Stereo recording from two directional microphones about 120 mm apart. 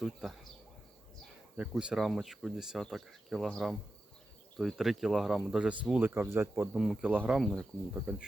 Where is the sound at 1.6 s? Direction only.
5° right (ahead or behind).